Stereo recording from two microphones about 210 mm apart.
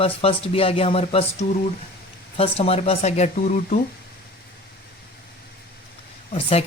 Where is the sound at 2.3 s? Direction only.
30° left (ahead or behind).